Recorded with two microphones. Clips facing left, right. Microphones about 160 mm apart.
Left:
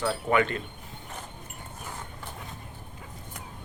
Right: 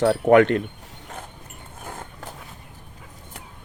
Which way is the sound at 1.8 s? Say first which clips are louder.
Right 5 dB; 50° right (ahead or behind).